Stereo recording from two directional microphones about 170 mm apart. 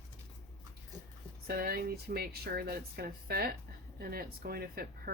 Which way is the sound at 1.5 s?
60° right (ahead or behind).